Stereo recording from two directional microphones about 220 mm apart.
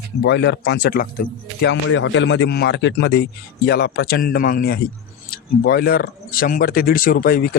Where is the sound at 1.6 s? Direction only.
60° left (ahead or behind).